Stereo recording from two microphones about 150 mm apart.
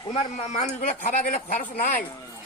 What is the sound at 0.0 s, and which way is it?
Speech, 40° left (ahead or behind).